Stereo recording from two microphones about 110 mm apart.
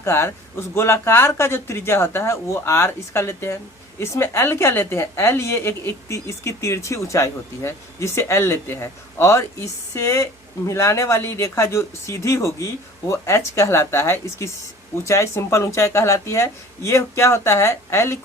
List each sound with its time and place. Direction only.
0.0 s a woman's voice: 20° left (ahead or behind)